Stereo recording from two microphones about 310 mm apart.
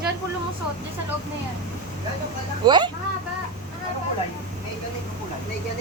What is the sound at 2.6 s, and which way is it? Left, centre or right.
Speech, centre.